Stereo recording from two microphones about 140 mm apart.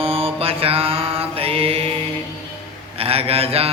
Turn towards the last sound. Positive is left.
turn(degrees=-45)  # may be behind; listen again after turning